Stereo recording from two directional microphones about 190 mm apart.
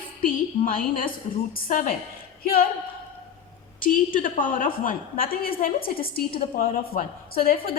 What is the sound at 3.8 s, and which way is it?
A woman's voice, 45° left (ahead or behind).